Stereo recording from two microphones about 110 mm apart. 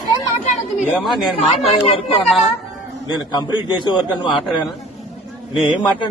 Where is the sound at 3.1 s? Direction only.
40° left (ahead or behind).